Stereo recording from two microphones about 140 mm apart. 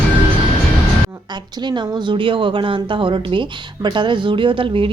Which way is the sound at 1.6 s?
35° right (ahead or behind).